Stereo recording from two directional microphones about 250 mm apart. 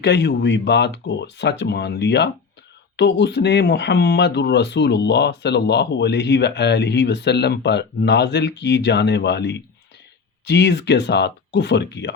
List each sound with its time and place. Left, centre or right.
0.0 s speech: left